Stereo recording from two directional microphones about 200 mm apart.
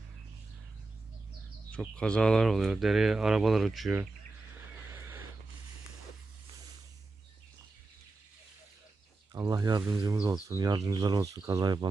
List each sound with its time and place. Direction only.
1.7 s speech: 5° left (ahead or behind)
4.7 s a sound: 10° right (ahead or behind)
9.3 s speech: 15° right (ahead or behind)